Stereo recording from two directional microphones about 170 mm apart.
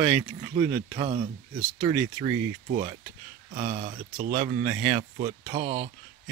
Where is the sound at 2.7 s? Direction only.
35° right (ahead or behind).